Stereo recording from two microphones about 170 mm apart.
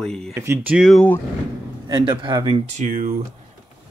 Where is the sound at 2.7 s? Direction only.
50° right (ahead or behind).